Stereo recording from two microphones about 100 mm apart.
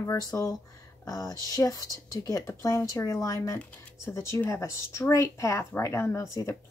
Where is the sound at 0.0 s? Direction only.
35° left (ahead or behind).